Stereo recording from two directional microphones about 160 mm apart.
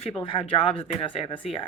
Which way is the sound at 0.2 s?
35° left (ahead or behind).